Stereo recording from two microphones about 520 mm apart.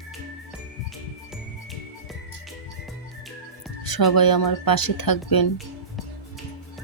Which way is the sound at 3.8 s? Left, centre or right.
Left.